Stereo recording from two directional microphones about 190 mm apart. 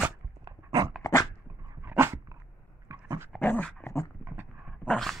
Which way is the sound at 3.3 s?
10° left (ahead or behind).